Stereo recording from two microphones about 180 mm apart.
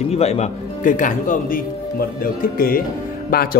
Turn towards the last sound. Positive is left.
turn(degrees=55)  # may be behind; listen again after turning